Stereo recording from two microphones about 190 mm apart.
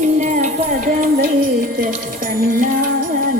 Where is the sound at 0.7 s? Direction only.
45° right (ahead or behind).